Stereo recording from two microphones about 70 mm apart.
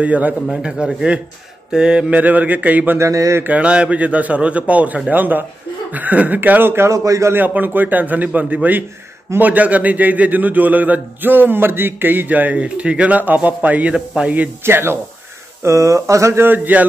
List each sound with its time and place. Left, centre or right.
0.0 s a man's voice: right
3.0 s speech: right
3.4 s a man's voice: centre; by 6.9 s right
6.9 s speech: right
7.3 s a man's voice: right
14.6 s speech: right
15.6 s speech: right
16.3 s a man's voice: right